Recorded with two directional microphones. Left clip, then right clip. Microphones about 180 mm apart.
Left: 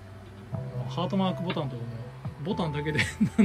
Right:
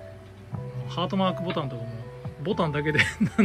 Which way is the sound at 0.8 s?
10° left (ahead or behind).